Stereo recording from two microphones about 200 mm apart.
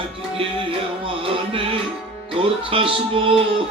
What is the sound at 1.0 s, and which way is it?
Music, 25° right (ahead or behind).